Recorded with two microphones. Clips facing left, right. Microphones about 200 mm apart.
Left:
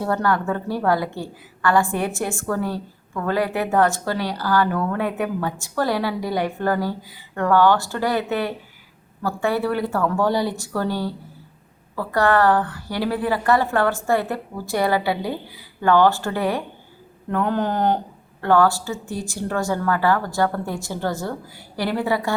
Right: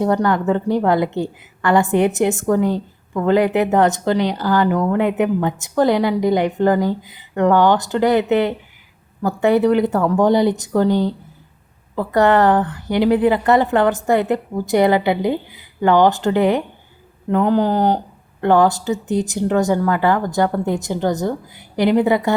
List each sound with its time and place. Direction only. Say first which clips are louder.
0.0 s a woman's voice: right 5 dB; 20° right (ahead or behind)